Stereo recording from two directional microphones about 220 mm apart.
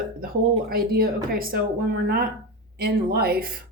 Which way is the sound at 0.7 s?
40° right (ahead or behind).